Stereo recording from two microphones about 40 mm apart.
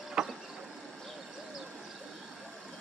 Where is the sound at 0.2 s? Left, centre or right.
Centre.